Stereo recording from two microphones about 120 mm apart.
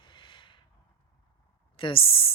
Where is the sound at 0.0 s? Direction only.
40° left (ahead or behind).